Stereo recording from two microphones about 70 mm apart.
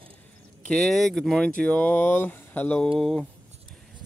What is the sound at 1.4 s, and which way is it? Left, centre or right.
Speech, centre.